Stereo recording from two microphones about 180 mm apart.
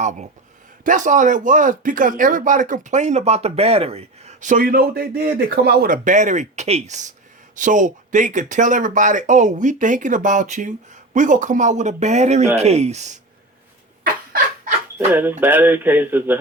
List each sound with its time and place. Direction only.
0.0 s speech: 40° right (ahead or behind)
14.0 s a sound: 50° right (ahead or behind)
14.9 s speech: 10° right (ahead or behind)